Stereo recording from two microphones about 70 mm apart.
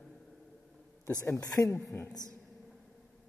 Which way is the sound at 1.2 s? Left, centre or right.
Left.